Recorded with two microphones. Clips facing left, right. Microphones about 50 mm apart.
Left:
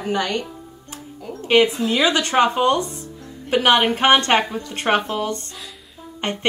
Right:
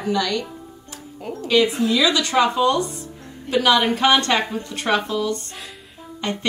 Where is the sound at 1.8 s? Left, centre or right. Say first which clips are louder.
Even; left.